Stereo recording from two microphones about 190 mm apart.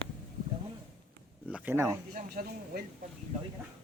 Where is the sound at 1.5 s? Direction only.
10° right (ahead or behind).